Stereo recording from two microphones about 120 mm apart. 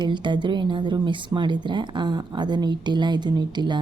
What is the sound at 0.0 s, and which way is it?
Speech, 40° right (ahead or behind).